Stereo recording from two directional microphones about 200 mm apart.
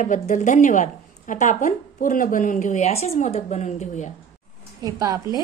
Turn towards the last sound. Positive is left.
turn(degrees=-15)  # may be behind; listen again after turning